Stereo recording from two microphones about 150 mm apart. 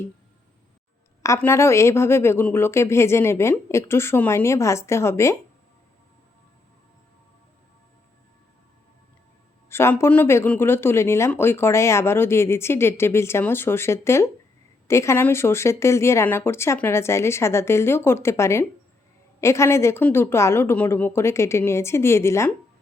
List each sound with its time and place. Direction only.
1.2 s speech: 20° left (ahead or behind)
9.6 s speech: 15° left (ahead or behind)